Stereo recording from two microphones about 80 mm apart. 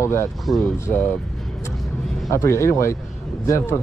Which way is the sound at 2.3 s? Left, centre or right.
Left.